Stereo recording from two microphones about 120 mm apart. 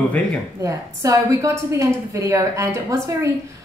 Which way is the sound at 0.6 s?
25° right (ahead or behind).